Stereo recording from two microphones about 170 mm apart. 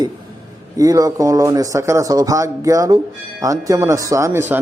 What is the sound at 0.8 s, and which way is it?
Speech, 20° right (ahead or behind).